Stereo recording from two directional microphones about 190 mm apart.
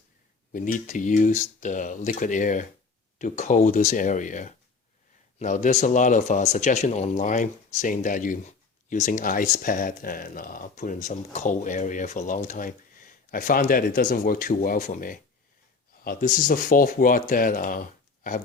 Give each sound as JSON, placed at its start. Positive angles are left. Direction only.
{"t": 0.5, "sound": "speech", "side_deg": 45}